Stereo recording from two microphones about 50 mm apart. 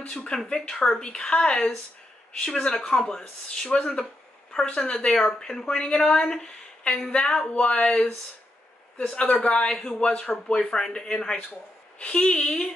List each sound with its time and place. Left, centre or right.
0.1 s speech: centre